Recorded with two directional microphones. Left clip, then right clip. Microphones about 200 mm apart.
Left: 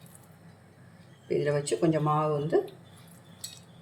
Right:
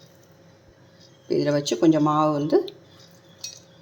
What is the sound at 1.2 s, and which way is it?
Speech, 30° right (ahead or behind).